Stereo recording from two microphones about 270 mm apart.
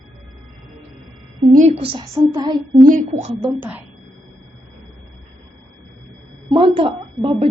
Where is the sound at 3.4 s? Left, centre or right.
Centre.